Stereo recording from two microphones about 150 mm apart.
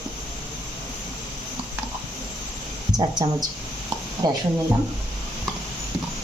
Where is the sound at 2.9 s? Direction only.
30° right (ahead or behind).